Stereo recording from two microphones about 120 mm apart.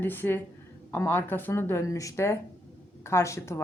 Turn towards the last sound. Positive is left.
turn(degrees=25)  # may be behind; listen again after turning